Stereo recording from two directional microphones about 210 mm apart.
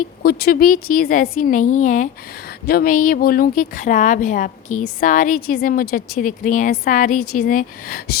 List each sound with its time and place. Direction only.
0.2 s a woman's voice: 50° left (ahead or behind)